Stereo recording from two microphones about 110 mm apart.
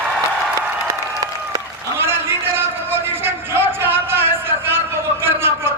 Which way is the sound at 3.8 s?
20° right (ahead or behind).